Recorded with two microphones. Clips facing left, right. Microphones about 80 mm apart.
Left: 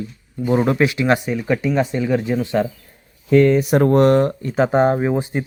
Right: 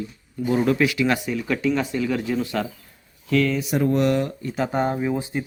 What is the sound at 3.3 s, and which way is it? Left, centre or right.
Speech, left.